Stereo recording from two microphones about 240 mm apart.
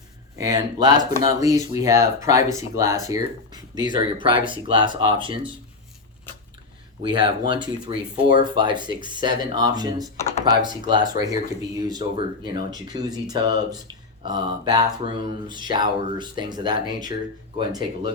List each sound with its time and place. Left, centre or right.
0.3 s speech: centre
7.0 s speech: centre